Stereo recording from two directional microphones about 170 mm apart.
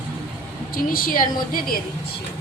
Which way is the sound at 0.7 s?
55° left (ahead or behind).